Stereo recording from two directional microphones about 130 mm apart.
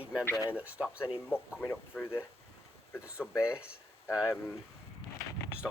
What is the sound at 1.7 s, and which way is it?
Speech, 15° left (ahead or behind).